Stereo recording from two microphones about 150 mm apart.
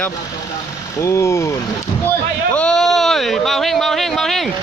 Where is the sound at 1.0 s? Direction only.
20° left (ahead or behind).